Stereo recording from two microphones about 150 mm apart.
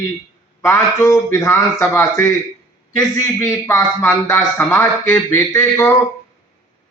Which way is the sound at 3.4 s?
20° left (ahead or behind).